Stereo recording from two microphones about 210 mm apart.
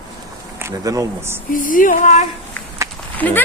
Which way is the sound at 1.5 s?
40° left (ahead or behind).